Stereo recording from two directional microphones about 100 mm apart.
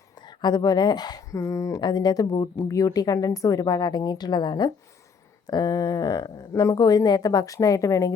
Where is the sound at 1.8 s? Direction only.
45° left (ahead or behind).